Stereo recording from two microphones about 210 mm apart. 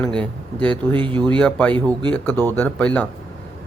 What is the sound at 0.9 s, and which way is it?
Speech, 25° right (ahead or behind).